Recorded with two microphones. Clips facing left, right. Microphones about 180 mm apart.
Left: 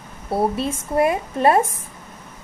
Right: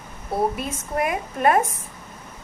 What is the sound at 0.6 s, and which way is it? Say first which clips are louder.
Speech: left 6 dB; 30° left (ahead or behind).